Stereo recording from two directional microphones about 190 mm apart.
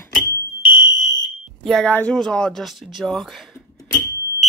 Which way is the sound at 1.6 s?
Centre (ahead or behind).